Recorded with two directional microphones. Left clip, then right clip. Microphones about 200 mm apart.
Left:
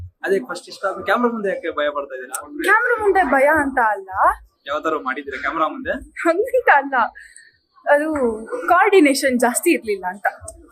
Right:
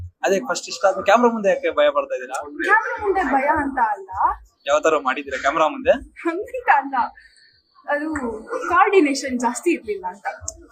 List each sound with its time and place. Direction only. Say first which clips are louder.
0.2 s a man's voice: right 1 dB; 5° right (ahead or behind)
2.6 s a woman's voice: left 3 dB; 60° left (ahead or behind)
4.6 s a man's voice: right 5 dB; 5° right (ahead or behind)
6.1 s a woman's voice: left 8 dB; 60° left (ahead or behind)
8.7 s a woman's voice: left 3 dB; 60° left (ahead or behind)